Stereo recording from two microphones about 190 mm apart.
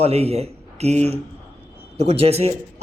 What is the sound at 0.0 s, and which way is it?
Speech, 30° right (ahead or behind).